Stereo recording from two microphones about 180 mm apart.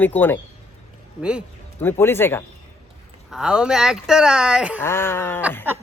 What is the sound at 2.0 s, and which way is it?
Speech, 15° left (ahead or behind).